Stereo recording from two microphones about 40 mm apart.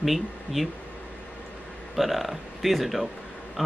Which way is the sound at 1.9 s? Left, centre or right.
Centre.